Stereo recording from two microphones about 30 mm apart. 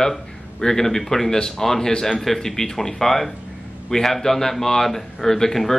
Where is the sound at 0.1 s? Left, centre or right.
Centre.